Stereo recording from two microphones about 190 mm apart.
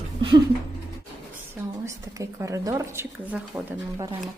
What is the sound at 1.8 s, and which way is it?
Speech, 15° right (ahead or behind).